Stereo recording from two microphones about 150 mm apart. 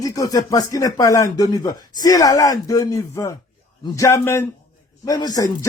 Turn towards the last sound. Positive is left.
turn(degrees=25)  # may be behind; listen again after turning